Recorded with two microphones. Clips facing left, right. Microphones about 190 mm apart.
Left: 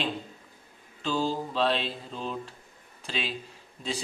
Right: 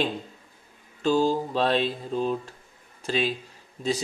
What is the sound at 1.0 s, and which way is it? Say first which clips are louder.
Mantra: right 6 dB; 45° right (ahead or behind).